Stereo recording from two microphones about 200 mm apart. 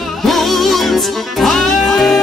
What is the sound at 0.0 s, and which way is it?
Music, centre (ahead or behind).